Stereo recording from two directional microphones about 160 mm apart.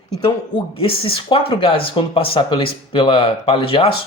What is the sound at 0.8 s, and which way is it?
Speech, 35° left (ahead or behind).